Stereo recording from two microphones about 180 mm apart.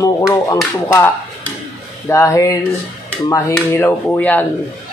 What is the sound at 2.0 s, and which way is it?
Speech, 15° left (ahead or behind).